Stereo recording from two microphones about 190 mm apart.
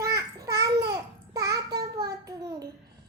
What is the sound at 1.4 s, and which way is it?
Child singing, 20° right (ahead or behind).